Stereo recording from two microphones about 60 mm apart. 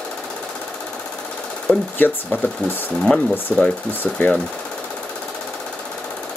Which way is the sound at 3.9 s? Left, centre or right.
Left.